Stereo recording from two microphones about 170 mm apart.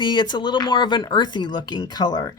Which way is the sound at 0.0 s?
25° left (ahead or behind).